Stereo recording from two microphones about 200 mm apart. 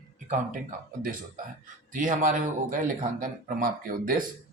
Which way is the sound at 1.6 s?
40° right (ahead or behind).